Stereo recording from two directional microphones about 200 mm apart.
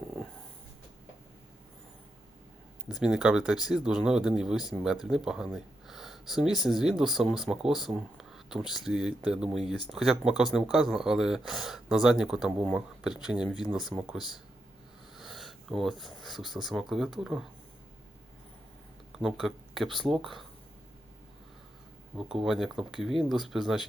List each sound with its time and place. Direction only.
2.9 s speech: 5° right (ahead or behind)
13.9 s speech: 20° right (ahead or behind)
15.1 s speech: centre (ahead or behind)
19.1 s speech: centre (ahead or behind)
22.1 s speech: 5° right (ahead or behind)